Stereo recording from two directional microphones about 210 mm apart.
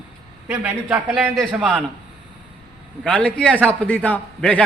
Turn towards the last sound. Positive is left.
turn(degrees=5)  # may be behind; listen again after turning